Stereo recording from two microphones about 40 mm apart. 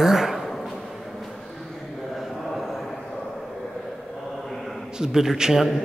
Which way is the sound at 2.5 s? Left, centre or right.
Centre.